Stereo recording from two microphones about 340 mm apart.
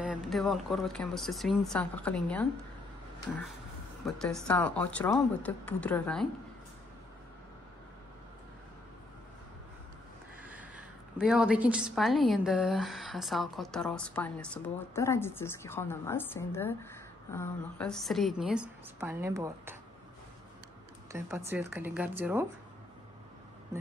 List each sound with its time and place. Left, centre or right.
0.0 s a woman's voice: centre
4.0 s a woman's voice: centre
10.4 s a sound: centre
11.1 s a woman's voice: centre
21.1 s speech: centre